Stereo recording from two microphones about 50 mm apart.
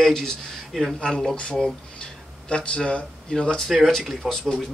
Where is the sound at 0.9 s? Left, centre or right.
Centre.